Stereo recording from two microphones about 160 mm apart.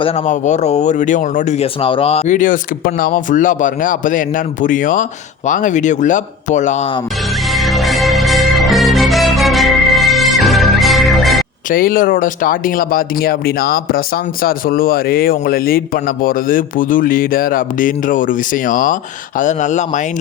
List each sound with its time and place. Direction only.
0.3 s speech: 45° left (ahead or behind)
1.8 s a man's voice: 35° left (ahead or behind)
7.5 s music: centre (ahead or behind)
11.7 s a man's voice: 60° left (ahead or behind)